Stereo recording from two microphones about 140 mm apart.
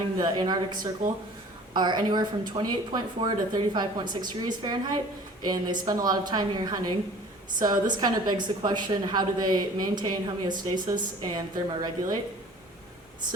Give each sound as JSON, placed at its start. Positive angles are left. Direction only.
{"t": 0.2, "sound": "a woman's voice", "side_deg": -30}